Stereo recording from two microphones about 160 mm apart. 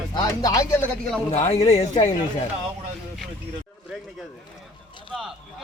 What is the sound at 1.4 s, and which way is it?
Speech, 40° left (ahead or behind).